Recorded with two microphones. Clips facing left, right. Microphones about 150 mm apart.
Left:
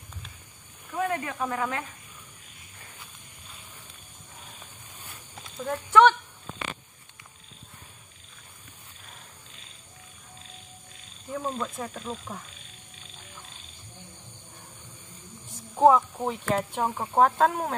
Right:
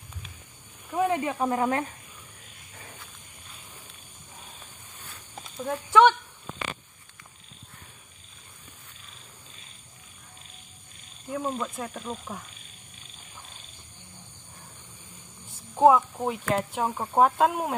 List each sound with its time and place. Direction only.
0.8 s speech: 15° right (ahead or behind)
1.4 s speech: 35° right (ahead or behind)
5.9 s speech: 15° right (ahead or behind)
11.2 s speech: centre (ahead or behind)
15.7 s a sound: centre (ahead or behind)
16.2 s speech: 5° right (ahead or behind)